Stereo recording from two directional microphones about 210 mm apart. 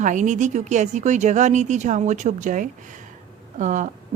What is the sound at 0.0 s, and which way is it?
A woman's voice, 35° right (ahead or behind).